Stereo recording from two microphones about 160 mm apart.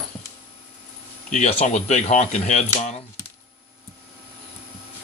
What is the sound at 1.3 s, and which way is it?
Speech, 50° left (ahead or behind).